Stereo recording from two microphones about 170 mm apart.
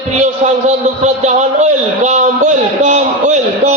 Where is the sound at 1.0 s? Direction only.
45° right (ahead or behind).